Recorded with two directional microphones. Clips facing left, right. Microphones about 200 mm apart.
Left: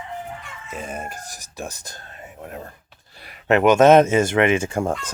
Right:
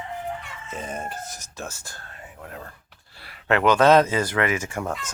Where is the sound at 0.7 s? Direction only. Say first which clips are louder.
Left 1 dB; 10° left (ahead or behind).